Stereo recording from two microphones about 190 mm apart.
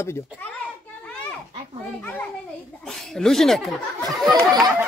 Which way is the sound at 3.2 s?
Centre (ahead or behind).